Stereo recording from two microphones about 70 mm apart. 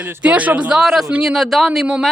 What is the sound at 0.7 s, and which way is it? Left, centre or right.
Speech, centre.